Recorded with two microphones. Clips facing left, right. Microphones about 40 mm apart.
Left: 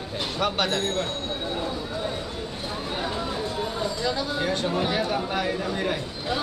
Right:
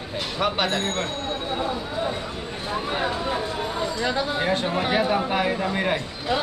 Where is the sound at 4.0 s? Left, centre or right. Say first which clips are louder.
Right 3 dB; right.